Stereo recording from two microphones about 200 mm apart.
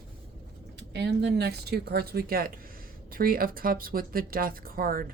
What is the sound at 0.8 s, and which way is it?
Speech, 55° right (ahead or behind).